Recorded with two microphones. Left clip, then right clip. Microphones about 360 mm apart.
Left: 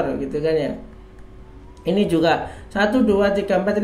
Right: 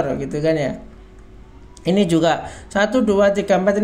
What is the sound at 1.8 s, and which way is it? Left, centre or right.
Speech, right.